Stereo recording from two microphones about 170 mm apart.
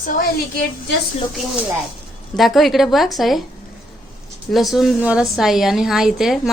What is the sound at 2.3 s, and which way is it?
A woman's voice, centre (ahead or behind).